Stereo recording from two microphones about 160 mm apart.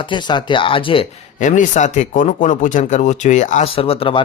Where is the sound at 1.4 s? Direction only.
50° left (ahead or behind).